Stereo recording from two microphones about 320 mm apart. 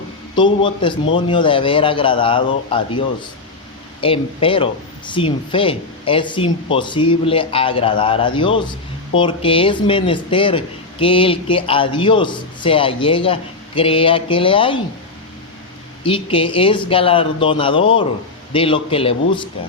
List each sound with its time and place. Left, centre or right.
0.3 s speech: centre
4.0 s speech: centre
16.0 s speech: centre